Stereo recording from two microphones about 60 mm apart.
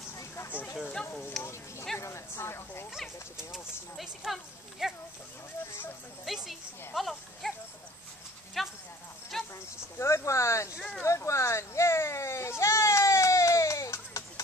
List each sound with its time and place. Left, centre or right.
1.4 s speech: left
4.0 s speech: centre
6.2 s speech: centre
8.6 s clip-clop: centre
9.3 s insect: centre
9.9 s speech: left
11.0 s sheep: left